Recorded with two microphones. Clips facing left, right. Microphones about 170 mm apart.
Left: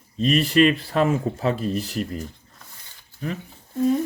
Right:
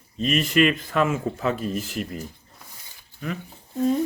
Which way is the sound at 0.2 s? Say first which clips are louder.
Left 3 dB; 35° left (ahead or behind).